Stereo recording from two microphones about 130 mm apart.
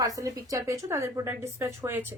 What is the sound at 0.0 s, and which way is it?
A woman's voice, 25° right (ahead or behind).